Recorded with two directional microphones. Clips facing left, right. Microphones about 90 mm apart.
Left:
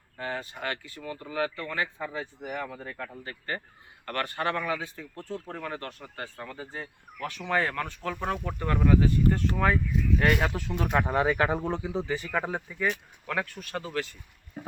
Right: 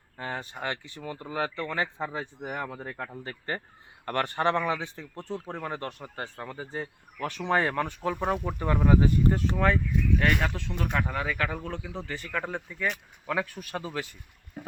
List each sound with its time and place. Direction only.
0.3 s speech: 25° right (ahead or behind)
7.6 s speech: 20° right (ahead or behind)
9.6 s speech: 5° left (ahead or behind)
10.9 s speech: 25° left (ahead or behind); by 12.9 s 5° left (ahead or behind)
13.2 s speech: 10° right (ahead or behind)